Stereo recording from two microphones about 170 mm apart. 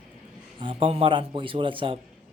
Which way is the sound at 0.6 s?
30° right (ahead or behind).